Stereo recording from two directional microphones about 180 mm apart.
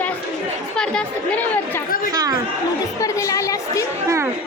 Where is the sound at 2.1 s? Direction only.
20° right (ahead or behind).